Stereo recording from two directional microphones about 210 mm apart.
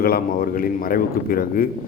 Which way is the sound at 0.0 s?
45° left (ahead or behind).